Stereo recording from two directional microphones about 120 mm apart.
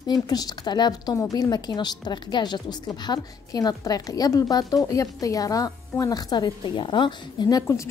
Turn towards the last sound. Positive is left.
turn(degrees=25)  # may be behind; listen again after turning